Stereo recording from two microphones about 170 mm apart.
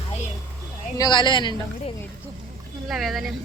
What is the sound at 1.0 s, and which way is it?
Speech, 25° left (ahead or behind).